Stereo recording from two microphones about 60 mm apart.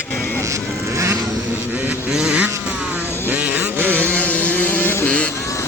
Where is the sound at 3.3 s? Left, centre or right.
Right.